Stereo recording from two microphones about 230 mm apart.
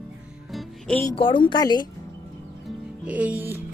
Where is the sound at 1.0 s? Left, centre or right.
Left.